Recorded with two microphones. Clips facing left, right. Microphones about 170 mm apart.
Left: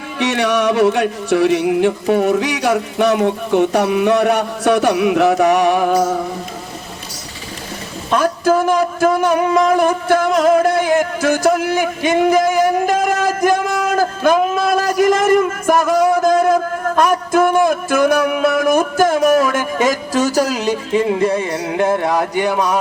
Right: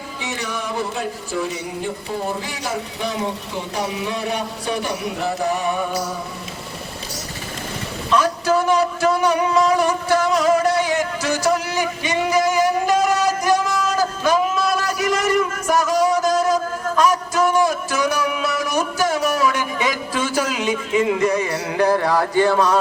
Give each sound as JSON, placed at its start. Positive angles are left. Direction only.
{"t": 0.2, "sound": "music", "side_deg": 85}
{"t": 8.1, "sound": "speech", "side_deg": 50}